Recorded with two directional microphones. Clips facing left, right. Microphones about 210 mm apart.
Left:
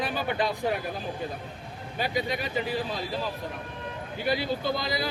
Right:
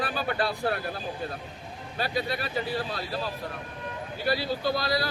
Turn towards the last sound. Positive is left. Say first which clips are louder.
# right 2 dB
turn(degrees=20)  # may be behind; listen again after turning